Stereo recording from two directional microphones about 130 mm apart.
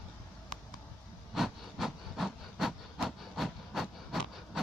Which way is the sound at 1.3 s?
Centre (ahead or behind).